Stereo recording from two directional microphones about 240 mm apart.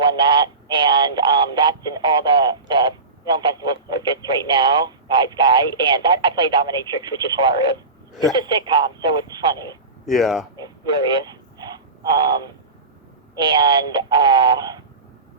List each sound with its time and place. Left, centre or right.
0.0 s speech: centre
10.1 s speech: centre
10.6 s radio: centre
13.3 s speech: centre